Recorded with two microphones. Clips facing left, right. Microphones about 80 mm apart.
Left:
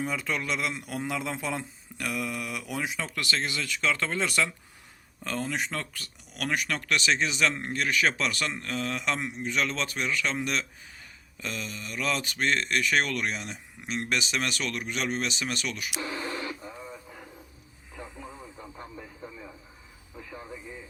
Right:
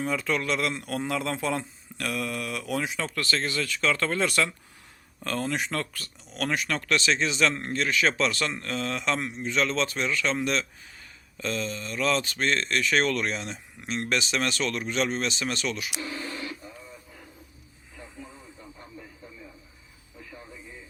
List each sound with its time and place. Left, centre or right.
0.0 s speech: centre
3.8 s speech: centre
5.5 s speech: centre
6.8 s speech: centre
16.0 s a sound: left